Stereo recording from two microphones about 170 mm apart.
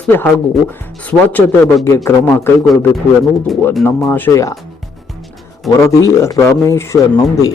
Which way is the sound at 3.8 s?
10° left (ahead or behind).